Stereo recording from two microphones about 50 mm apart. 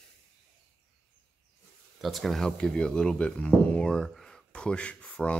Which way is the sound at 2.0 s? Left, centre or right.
Centre.